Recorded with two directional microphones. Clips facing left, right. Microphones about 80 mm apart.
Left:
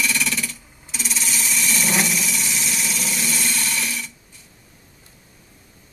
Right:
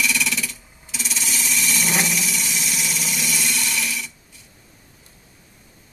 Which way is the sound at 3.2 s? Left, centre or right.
Left.